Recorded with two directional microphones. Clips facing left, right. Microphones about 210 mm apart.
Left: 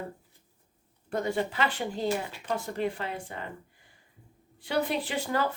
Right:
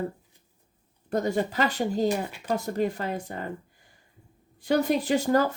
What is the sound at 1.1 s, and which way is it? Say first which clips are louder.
Speech: right 4 dB; 40° right (ahead or behind).